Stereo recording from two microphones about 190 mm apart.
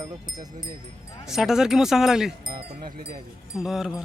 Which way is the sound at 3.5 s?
Centre (ahead or behind).